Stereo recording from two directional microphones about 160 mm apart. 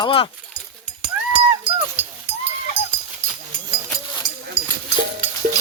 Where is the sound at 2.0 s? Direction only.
10° right (ahead or behind).